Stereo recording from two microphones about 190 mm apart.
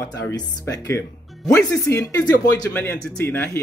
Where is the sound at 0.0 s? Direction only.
15° left (ahead or behind).